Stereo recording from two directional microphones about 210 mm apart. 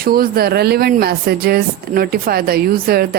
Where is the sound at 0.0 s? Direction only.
45° right (ahead or behind).